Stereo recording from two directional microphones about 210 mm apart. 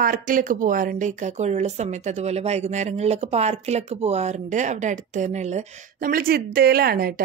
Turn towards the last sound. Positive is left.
turn(degrees=-45)  # may be behind; listen again after turning